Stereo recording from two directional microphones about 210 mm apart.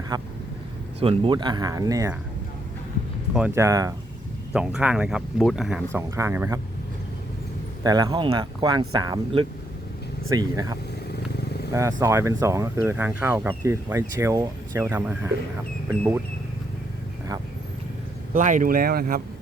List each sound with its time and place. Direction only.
0.1 s speech: 20° right (ahead or behind)
3.3 s speech: 10° right (ahead or behind)
4.5 s speech: 5° right (ahead or behind)
7.9 s speech: 20° right (ahead or behind)
11.1 s vehicle: 50° left (ahead or behind)
11.7 s speech: 15° right (ahead or behind)
18.3 s speech: 40° right (ahead or behind)